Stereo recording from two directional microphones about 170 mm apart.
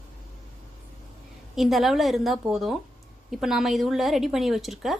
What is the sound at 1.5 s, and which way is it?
A woman's voice, centre (ahead or behind).